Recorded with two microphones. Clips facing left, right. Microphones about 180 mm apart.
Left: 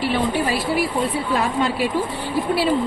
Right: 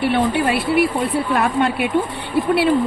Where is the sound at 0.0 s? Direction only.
60° right (ahead or behind).